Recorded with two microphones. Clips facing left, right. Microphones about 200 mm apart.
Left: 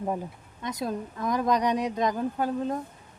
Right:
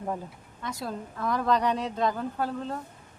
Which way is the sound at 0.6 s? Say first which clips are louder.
Left 4 dB; 20° left (ahead or behind).